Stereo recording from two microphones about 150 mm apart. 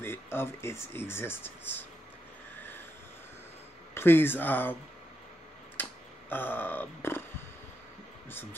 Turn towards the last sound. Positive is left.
turn(degrees=15)  # may be behind; listen again after turning